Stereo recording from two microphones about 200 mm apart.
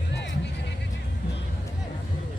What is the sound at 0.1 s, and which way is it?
Music, 60° left (ahead or behind).